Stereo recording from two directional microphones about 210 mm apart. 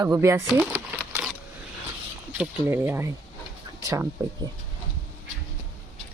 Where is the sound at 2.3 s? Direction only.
10° right (ahead or behind).